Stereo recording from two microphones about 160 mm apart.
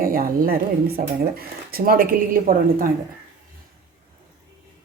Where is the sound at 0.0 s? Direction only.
65° right (ahead or behind).